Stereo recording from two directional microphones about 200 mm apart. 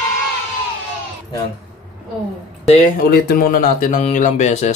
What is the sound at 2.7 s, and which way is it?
Speech, 45° left (ahead or behind).